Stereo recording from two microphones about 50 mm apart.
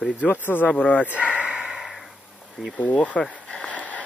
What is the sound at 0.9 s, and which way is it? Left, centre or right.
Speech, left.